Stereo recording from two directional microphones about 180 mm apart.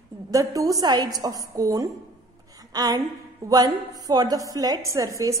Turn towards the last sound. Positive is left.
turn(degrees=-20)  # may be behind; listen again after turning